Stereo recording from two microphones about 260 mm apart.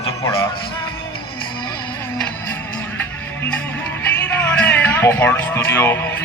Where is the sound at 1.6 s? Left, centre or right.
Centre.